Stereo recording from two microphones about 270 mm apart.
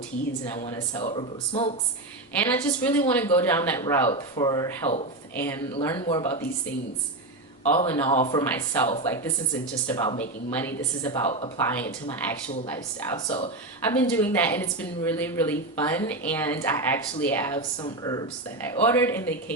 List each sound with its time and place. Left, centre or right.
1.0 s speech: left
2.5 s speech: centre
7.6 s speech: centre
8.1 s speech: left
8.4 s speech: centre
10.2 s speech: centre
11.1 s speech: left
11.6 s speech: centre
13.8 s speech: centre